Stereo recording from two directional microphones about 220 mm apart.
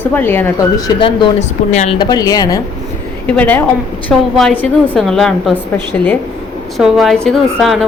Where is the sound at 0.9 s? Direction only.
20° left (ahead or behind).